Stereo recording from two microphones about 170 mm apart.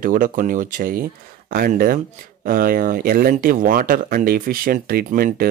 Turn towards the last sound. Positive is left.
turn(degrees=-60)  # may be behind; listen again after turning